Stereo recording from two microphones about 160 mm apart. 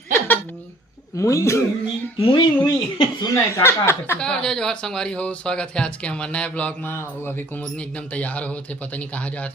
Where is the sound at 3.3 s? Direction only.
15° left (ahead or behind).